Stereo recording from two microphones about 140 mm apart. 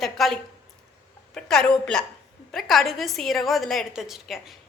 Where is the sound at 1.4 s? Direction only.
5° left (ahead or behind).